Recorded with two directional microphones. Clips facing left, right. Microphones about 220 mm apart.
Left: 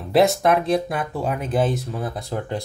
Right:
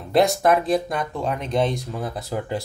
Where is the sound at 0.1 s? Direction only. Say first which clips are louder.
Left 1 dB; centre (ahead or behind).